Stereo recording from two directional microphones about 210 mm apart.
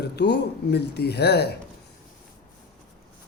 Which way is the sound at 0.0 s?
50° left (ahead or behind).